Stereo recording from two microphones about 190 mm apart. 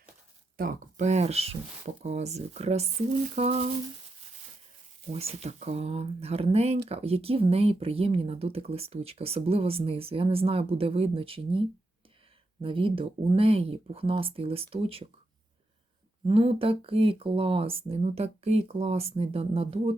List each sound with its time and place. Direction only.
0.5 s speech: 45° right (ahead or behind)
5.1 s speech: 35° right (ahead or behind)
12.6 s speech: 30° right (ahead or behind)
16.2 s speech: 30° right (ahead or behind)